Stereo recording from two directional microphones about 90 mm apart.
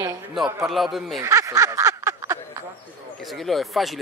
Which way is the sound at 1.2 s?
35° right (ahead or behind).